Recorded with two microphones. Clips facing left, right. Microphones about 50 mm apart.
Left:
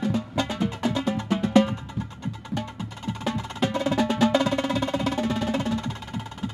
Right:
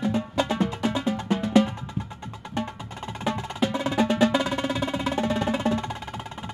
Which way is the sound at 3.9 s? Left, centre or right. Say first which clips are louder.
Right 1 dB; right.